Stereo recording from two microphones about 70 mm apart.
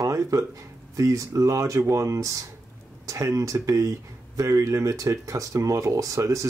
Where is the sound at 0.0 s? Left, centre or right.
Right.